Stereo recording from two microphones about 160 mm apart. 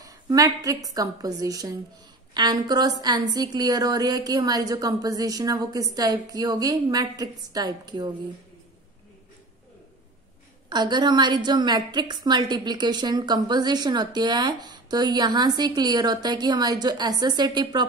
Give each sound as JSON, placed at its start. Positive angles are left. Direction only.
{"t": 0.0, "sound": "a woman's voice", "side_deg": -20}
{"t": 10.7, "sound": "a woman's voice", "side_deg": -25}